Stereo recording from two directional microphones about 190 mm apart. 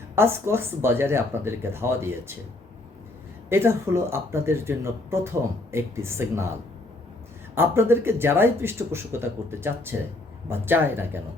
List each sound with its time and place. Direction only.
0.2 s speech: 15° right (ahead or behind)
3.5 s speech: 15° right (ahead or behind)
7.5 s speech: 10° right (ahead or behind)